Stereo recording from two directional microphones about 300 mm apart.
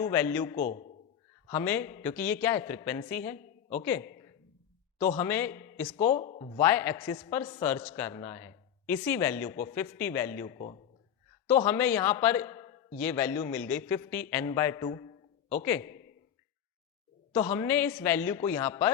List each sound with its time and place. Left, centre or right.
0.0 s a man's voice: centre
0.6 s speech: left
1.5 s a man's voice: centre
4.9 s a man's voice: left
5.2 s a man's voice: centre
6.0 s speech: left
6.6 s a man's voice: centre
11.6 s a man's voice: centre
17.3 s a man's voice: centre